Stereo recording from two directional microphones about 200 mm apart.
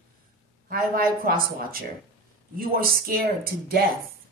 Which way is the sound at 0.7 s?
45° right (ahead or behind).